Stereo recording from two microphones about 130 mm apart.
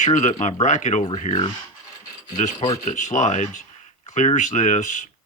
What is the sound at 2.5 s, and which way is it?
Speech, 30° left (ahead or behind).